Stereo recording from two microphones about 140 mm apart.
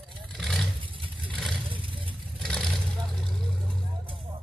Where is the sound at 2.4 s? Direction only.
5° left (ahead or behind).